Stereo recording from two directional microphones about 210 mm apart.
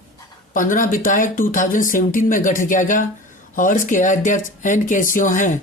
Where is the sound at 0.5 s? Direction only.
40° left (ahead or behind).